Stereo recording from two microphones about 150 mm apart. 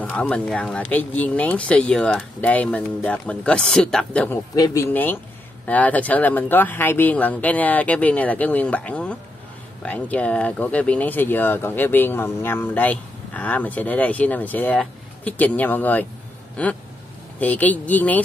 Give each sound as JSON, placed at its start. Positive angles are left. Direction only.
{"t": 0.0, "sound": "speech", "side_deg": 10}
{"t": 4.6, "sound": "speech", "side_deg": 20}